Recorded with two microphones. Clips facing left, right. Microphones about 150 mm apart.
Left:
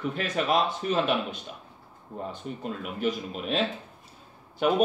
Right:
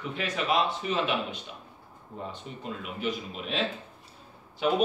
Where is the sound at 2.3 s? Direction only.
45° left (ahead or behind).